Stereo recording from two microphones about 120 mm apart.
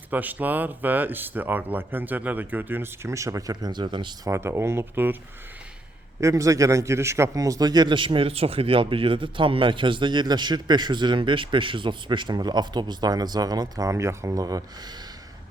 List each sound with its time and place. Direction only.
0.1 s speech: 15° right (ahead or behind); by 4.1 s 40° right (ahead or behind)
4.3 s speech: 20° right (ahead or behind)
6.1 s a man's voice: 25° right (ahead or behind)